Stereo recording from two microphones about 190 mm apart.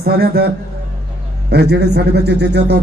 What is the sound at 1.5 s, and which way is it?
A man's voice, 60° right (ahead or behind).